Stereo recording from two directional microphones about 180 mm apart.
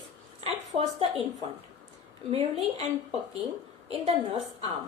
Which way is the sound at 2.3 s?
35° right (ahead or behind).